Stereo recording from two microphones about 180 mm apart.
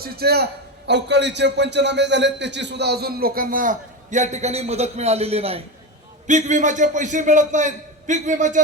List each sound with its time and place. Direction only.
0.0 s a man's voice: 60° right (ahead or behind)
0.9 s a man's voice: 70° right (ahead or behind); by 8.6 s 45° right (ahead or behind)